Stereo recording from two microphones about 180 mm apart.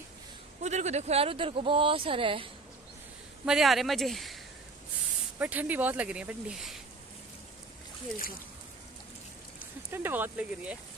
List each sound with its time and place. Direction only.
0.7 s speech: 40° right (ahead or behind)
3.4 s speech: centre (ahead or behind)
5.4 s speech: 10° right (ahead or behind)
9.8 s speech: 10° right (ahead or behind)